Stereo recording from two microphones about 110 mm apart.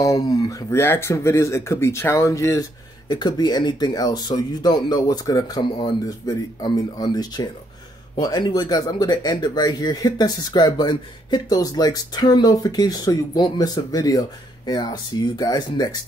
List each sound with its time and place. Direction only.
0.0 s speech: 30° left (ahead or behind)
3.1 s speech: 40° left (ahead or behind)